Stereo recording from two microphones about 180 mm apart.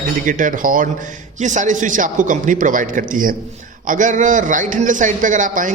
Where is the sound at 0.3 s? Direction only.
45° right (ahead or behind).